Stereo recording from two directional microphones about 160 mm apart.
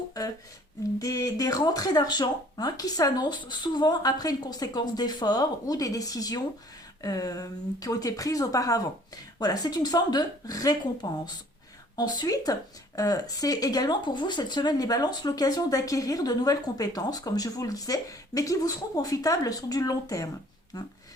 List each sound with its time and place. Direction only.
0.9 s speech: 20° left (ahead or behind)